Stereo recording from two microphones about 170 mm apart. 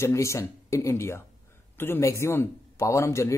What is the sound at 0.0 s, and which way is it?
Speech, 15° left (ahead or behind).